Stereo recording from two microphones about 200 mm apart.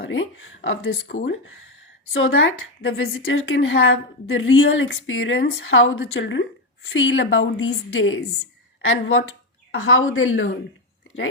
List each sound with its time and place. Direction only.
0.0 s a woman's voice: 70° left (ahead or behind)
2.1 s a woman's voice: 80° left
2.8 s a woman's voice: 90° left
8.8 s a woman's voice: 90° left